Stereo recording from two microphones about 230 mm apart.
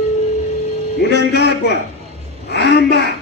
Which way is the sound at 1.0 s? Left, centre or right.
Left.